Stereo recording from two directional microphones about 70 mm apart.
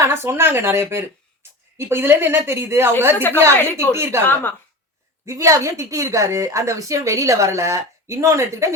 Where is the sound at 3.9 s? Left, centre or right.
Right.